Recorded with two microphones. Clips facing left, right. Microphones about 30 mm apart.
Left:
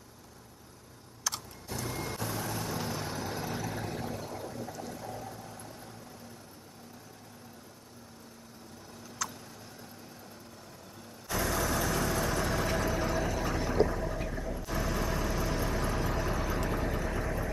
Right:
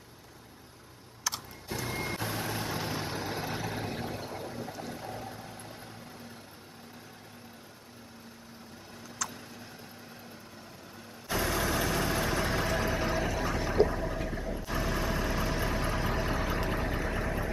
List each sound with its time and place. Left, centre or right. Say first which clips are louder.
1.3 s vehicle: right 1 dB; centre
1.7 s vehicle: right 2 dB; right
9.2 s tick: even; centre
11.2 s vehicle: right 1 dB; right
13.3 s vehicle: right 1 dB; centre